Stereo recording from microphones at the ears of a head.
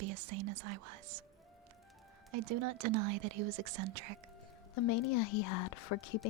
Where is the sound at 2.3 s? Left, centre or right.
Right.